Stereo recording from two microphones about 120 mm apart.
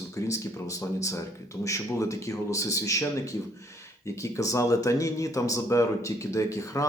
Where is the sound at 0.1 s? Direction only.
25° left (ahead or behind).